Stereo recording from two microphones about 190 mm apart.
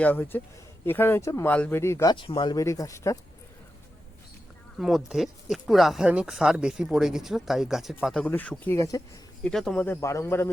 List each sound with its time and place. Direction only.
0.0 s speech: 10° left (ahead or behind)
2.1 s speech: 25° left (ahead or behind)
4.8 s speech: centre (ahead or behind); by 9.0 s 15° left (ahead or behind)
9.4 s speech: 5° left (ahead or behind)